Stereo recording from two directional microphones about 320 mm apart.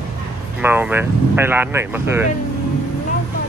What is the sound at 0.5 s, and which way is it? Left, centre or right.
Speech, centre.